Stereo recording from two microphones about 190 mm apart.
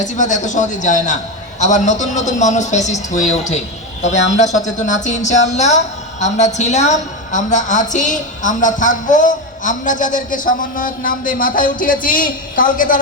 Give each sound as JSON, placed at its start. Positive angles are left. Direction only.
{"t": 0.0, "sound": "a man's voice", "side_deg": 40}